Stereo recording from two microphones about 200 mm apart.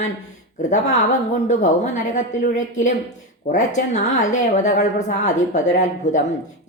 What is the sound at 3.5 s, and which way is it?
A woman's voice, 35° left (ahead or behind).